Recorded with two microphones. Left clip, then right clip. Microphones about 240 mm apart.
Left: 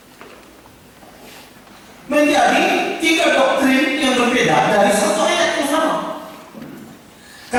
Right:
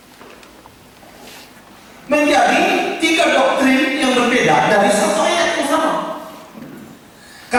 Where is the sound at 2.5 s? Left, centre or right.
Centre.